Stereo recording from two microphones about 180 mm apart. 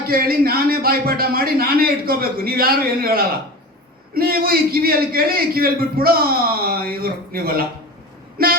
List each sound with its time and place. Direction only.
0.1 s a man's voice: 55° right (ahead or behind)
8.4 s female singing: 55° right (ahead or behind)